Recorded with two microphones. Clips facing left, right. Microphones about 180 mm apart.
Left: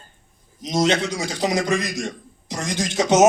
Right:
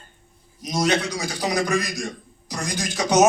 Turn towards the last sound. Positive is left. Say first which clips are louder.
# left 2 dB
turn(degrees=25)  # may be behind; listen again after turning